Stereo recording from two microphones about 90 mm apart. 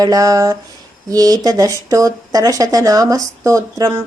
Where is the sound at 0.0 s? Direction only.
40° right (ahead or behind).